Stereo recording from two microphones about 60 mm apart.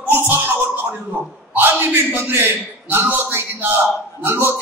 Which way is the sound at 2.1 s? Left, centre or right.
Right.